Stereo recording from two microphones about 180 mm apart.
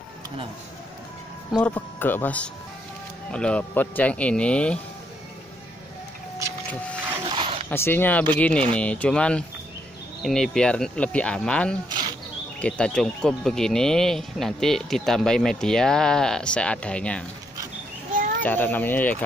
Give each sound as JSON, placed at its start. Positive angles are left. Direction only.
{"t": 1.5, "sound": "speech", "side_deg": 10}
{"t": 7.2, "sound": "dog", "side_deg": -30}
{"t": 7.7, "sound": "speech", "side_deg": 10}
{"t": 18.4, "sound": "speech", "side_deg": 10}